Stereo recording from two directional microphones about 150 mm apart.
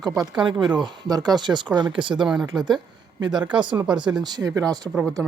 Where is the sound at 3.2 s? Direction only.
25° right (ahead or behind).